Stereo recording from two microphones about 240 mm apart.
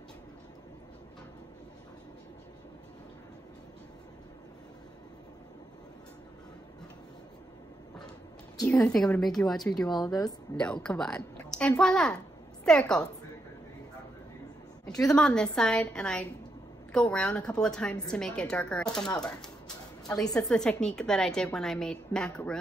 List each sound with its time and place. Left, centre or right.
8.5 s a woman's voice: centre
9.9 s a woman's voice: centre
10.6 s a woman's voice: centre
15.0 s a woman's voice: centre
20.1 s a woman's voice: centre
20.3 s a woman's voice: centre